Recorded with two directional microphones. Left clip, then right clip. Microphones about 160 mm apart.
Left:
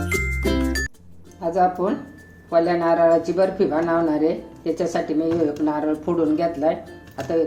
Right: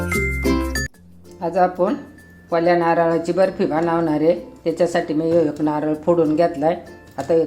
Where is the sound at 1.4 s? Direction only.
40° right (ahead or behind).